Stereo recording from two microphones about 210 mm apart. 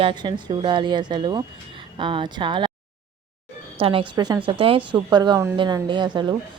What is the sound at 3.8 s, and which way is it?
A woman's voice, 25° right (ahead or behind).